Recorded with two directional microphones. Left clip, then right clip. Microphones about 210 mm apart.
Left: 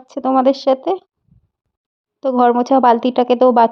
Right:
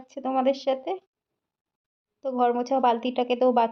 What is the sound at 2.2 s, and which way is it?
Speech, 35° left (ahead or behind).